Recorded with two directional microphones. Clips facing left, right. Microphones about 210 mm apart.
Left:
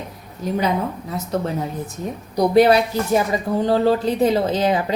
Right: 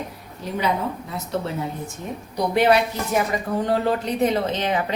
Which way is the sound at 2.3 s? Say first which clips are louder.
Left 4 dB; 35° left (ahead or behind).